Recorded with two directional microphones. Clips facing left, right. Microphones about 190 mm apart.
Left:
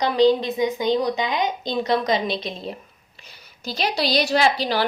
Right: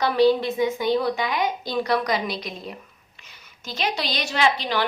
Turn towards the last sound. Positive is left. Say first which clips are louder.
# left 3 dB
turn(degrees=35)  # may be behind; listen again after turning